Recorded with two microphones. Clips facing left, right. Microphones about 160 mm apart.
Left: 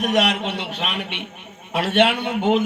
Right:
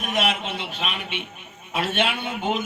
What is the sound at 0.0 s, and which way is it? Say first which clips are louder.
A man's voice: left 5 dB; 70° left (ahead or behind).